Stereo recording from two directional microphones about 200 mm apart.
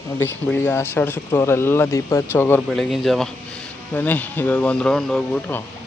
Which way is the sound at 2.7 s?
Centre (ahead or behind).